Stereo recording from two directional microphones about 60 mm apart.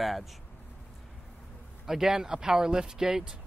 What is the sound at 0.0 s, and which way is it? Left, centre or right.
Speech, centre.